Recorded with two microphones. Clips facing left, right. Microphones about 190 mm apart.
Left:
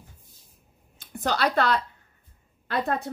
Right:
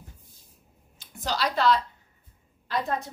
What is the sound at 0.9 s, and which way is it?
Speech, 55° left (ahead or behind).